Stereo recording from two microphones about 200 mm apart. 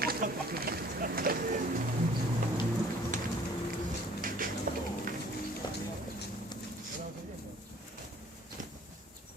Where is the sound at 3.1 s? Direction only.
40° right (ahead or behind).